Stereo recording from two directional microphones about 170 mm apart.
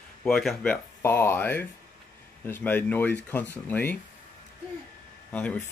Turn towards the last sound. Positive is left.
turn(degrees=10)  # may be behind; listen again after turning